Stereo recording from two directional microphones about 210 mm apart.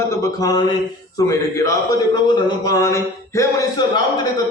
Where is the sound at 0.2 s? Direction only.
20° left (ahead or behind).